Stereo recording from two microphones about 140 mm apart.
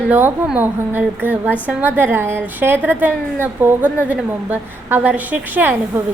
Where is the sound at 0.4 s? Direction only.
10° right (ahead or behind).